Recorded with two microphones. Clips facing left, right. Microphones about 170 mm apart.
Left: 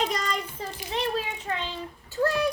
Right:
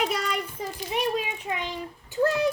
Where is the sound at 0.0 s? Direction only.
10° right (ahead or behind).